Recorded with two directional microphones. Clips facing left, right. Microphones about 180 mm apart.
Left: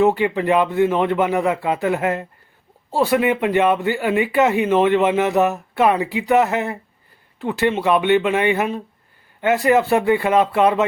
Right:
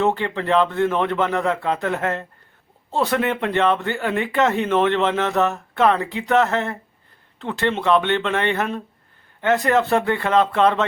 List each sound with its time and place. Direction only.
0.0 s speech: 10° left (ahead or behind)